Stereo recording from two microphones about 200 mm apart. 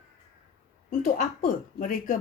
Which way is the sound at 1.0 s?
40° left (ahead or behind).